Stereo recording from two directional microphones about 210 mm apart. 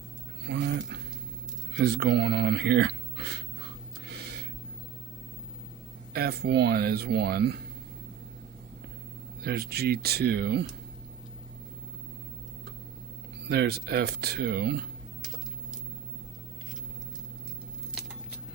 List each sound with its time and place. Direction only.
0.4 s a sound: 55° right (ahead or behind)
1.7 s speech: 55° right (ahead or behind)
4.0 s a sound: 50° right (ahead or behind)
6.1 s speech: 50° right (ahead or behind)
9.4 s speech: 50° right (ahead or behind)
13.5 s speech: 50° right (ahead or behind)